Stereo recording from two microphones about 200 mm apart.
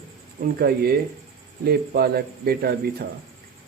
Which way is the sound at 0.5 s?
50° right (ahead or behind).